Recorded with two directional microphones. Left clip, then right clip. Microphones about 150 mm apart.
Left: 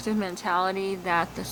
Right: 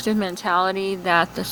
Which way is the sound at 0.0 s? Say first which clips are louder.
Right 5 dB; 25° right (ahead or behind).